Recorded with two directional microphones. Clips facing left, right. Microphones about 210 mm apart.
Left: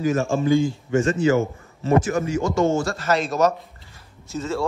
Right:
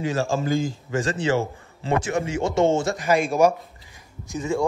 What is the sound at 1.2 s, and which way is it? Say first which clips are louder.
A man's voice: left 4 dB; 30° right (ahead or behind).